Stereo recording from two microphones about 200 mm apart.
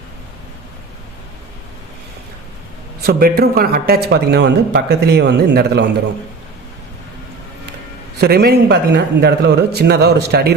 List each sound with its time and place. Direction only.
3.0 s speech: 50° right (ahead or behind)
8.2 s speech: 55° right (ahead or behind)